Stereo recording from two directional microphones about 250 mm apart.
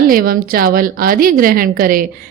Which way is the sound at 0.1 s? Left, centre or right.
Right.